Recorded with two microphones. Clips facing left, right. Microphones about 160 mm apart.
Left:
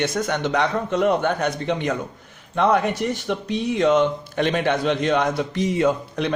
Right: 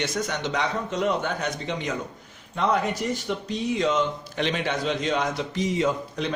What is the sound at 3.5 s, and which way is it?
A man's voice, 60° left (ahead or behind).